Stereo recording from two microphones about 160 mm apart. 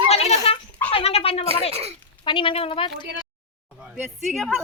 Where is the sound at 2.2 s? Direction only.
30° left (ahead or behind).